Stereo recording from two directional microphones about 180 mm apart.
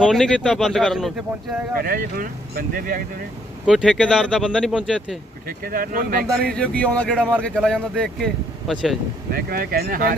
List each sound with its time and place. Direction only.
0.0 s speech: centre (ahead or behind)
1.8 s speech: 55° right (ahead or behind)
3.7 s speech: 5° right (ahead or behind)
5.5 s speech: 50° right (ahead or behind)
6.6 s speech: 10° left (ahead or behind)
9.3 s speech: 55° right (ahead or behind)